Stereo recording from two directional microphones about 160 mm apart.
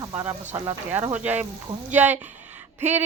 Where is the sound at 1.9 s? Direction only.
10° right (ahead or behind).